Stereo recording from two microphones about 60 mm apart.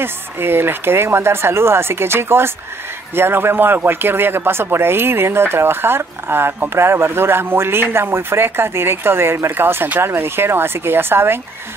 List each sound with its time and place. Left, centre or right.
0.0 s speech: right